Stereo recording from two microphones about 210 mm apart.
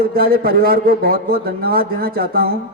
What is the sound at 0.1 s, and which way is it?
A man's voice, 45° right (ahead or behind).